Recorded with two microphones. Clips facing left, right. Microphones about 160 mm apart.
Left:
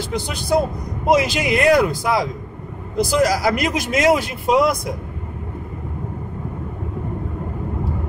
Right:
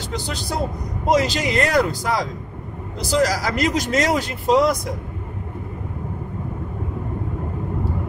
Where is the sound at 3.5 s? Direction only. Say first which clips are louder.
Right 1 dB; 10° left (ahead or behind).